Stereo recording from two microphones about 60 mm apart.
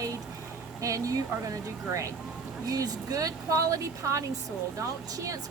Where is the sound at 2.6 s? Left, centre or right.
Right.